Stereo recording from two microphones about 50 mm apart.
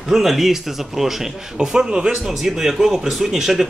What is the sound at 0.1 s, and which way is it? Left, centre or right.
A man's voice, centre.